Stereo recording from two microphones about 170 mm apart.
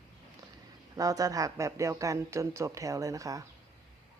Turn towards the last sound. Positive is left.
turn(degrees=-20)  # may be behind; listen again after turning